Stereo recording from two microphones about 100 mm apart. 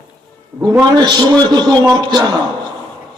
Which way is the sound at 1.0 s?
45° right (ahead or behind).